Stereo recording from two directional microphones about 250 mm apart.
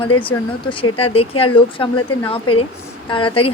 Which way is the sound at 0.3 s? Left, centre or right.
Left.